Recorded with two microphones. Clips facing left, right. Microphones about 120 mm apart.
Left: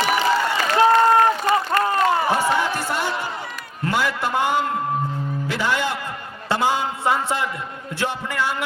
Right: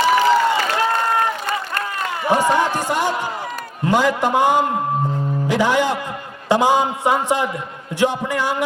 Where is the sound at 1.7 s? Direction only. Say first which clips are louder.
Left 6 dB; 35° left (ahead or behind).